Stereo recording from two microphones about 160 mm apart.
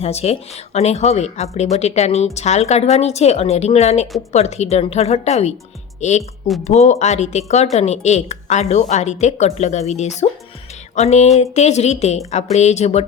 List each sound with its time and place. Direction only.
0.0 s speech: 40° left (ahead or behind)